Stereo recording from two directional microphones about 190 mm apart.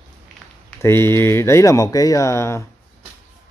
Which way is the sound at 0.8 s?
15° left (ahead or behind).